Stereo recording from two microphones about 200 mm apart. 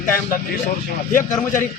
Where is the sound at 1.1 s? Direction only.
40° left (ahead or behind).